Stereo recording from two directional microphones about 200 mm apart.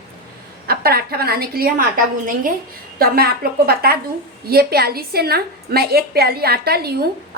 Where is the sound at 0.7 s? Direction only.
50° right (ahead or behind).